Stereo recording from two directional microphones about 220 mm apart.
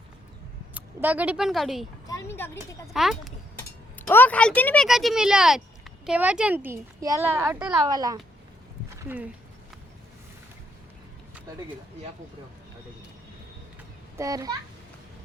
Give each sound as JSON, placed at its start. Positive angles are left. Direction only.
{"t": 0.7, "sound": "speech", "side_deg": -5}
{"t": 2.0, "sound": "speech", "side_deg": 10}
{"t": 2.9, "sound": "a woman's voice", "side_deg": 0}
{"t": 7.9, "sound": "a woman's voice", "side_deg": -15}
{"t": 9.0, "sound": "a woman's voice", "side_deg": -5}
{"t": 14.2, "sound": "a woman's voice", "side_deg": -15}